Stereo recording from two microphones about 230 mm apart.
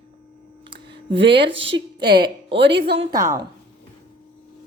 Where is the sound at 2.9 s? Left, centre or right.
Centre.